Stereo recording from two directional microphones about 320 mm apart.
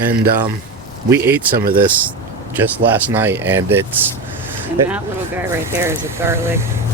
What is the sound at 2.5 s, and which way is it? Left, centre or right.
Speech, centre.